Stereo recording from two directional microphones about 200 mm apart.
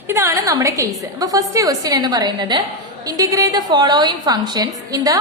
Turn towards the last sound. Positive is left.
turn(degrees=-15)  # may be behind; listen again after turning